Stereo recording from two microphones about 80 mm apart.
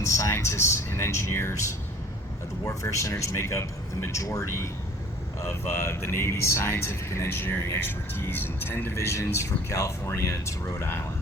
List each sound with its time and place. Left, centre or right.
0.0 s speech: left
2.6 s speech: left